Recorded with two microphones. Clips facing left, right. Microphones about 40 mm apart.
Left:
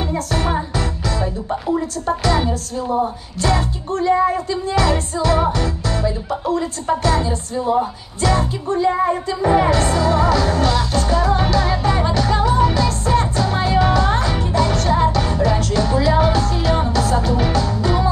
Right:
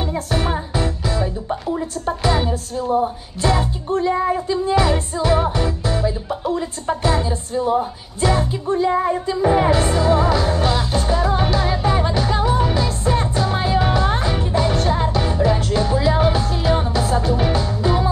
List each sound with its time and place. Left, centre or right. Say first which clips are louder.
0.7 s music: right 1 dB; centre
2.2 s music: right 1 dB; centre